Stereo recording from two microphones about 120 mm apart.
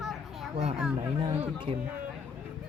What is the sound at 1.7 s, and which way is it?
Speech, 50° right (ahead or behind).